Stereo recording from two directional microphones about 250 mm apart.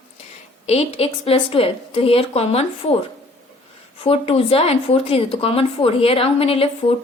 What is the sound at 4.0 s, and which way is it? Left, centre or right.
Speech, left.